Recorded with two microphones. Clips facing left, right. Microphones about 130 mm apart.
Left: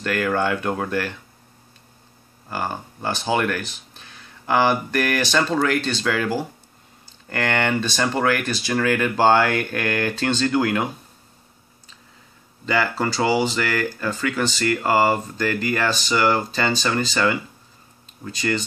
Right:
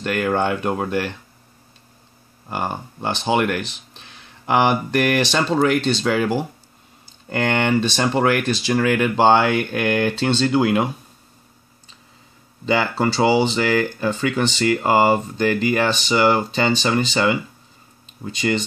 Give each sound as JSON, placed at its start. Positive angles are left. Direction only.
{"t": 0.0, "sound": "speech", "side_deg": -20}
{"t": 2.5, "sound": "speech", "side_deg": -20}
{"t": 12.6, "sound": "speech", "side_deg": -20}